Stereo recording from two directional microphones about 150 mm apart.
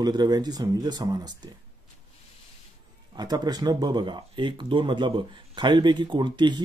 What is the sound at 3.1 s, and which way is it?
Speech, 25° right (ahead or behind).